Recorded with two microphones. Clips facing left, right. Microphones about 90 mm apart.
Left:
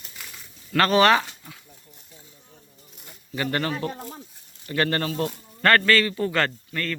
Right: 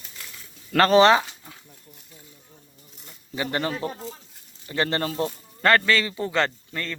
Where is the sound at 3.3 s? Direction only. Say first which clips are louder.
Left 1 dB; 15° right (ahead or behind).